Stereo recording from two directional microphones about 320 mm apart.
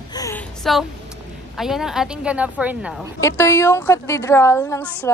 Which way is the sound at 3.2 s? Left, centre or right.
Centre.